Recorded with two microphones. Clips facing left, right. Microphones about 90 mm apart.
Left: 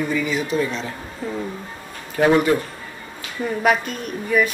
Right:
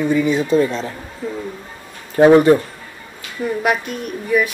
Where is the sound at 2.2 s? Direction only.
30° right (ahead or behind).